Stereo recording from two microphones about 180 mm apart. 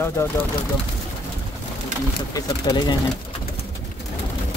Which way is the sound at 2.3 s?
20° left (ahead or behind).